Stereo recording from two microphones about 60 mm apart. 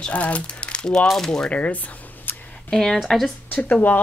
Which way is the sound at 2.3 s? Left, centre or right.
Left.